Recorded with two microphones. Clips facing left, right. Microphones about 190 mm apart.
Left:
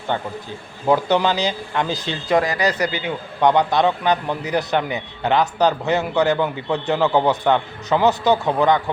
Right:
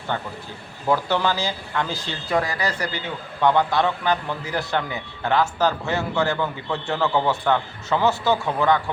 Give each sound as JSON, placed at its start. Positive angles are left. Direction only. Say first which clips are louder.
{"t": 0.1, "sound": "speech", "louder": "left 4 dB", "side_deg": 20}